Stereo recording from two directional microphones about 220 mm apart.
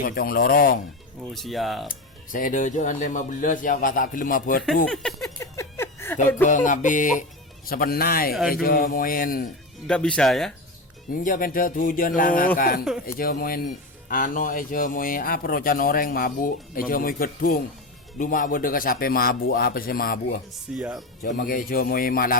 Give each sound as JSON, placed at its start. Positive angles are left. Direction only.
{"t": 0.0, "sound": "speech", "side_deg": 45}
{"t": 1.3, "sound": "speech", "side_deg": 0}
{"t": 1.9, "sound": "speech", "side_deg": 35}
{"t": 4.9, "sound": "speech", "side_deg": 0}
{"t": 5.4, "sound": "a sound", "side_deg": 10}
{"t": 6.5, "sound": "a man's voice", "side_deg": 35}
{"t": 9.8, "sound": "speech", "side_deg": 5}
{"t": 11.1, "sound": "speech", "side_deg": 40}
{"t": 20.7, "sound": "speech", "side_deg": 0}
{"t": 21.2, "sound": "speech", "side_deg": 40}